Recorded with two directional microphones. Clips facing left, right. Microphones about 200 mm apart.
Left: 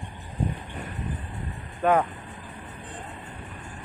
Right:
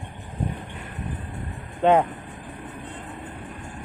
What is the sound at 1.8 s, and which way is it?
Speech, 25° right (ahead or behind).